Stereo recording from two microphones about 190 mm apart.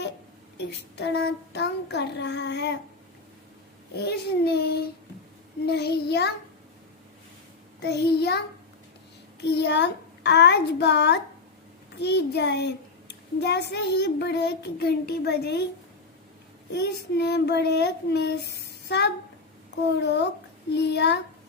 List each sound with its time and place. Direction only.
0.7 s a child's voice: 65° left (ahead or behind)
3.9 s a child's voice: 60° left (ahead or behind)
7.8 s a child's voice: 60° left (ahead or behind)
16.7 s a child's voice: 60° left (ahead or behind)